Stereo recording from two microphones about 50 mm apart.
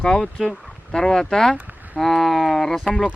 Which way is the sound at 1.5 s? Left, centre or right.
Right.